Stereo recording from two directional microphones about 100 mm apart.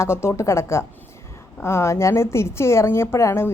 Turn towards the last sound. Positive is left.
turn(degrees=25)  # may be behind; listen again after turning